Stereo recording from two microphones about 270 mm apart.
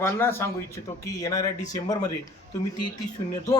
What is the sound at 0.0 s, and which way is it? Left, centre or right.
A man's voice, centre.